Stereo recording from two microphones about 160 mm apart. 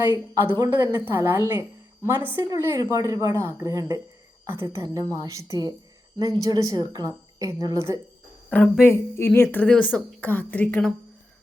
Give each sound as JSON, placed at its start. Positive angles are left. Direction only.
{"t": 0.0, "sound": "a woman's voice", "side_deg": -15}
{"t": 8.4, "sound": "a woman's voice", "side_deg": 10}